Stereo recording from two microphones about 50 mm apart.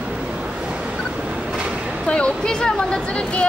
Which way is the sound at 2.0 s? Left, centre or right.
Left.